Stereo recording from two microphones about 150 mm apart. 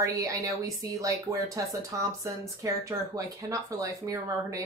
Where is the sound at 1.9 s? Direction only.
20° right (ahead or behind).